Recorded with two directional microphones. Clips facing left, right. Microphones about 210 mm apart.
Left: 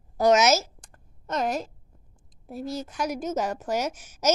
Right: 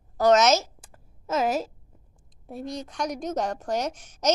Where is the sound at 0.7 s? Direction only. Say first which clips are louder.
Right 2 dB; 5° right (ahead or behind).